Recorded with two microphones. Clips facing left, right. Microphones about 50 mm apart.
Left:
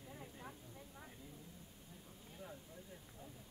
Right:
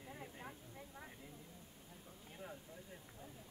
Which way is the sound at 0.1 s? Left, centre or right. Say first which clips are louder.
Right 1 dB; right.